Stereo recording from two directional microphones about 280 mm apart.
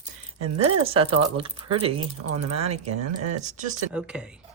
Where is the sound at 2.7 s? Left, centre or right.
Right.